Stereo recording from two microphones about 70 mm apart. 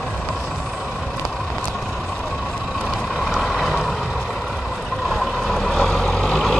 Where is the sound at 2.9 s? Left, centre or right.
Centre.